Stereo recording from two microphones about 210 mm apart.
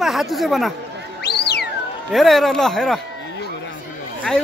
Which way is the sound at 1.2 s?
50° left (ahead or behind).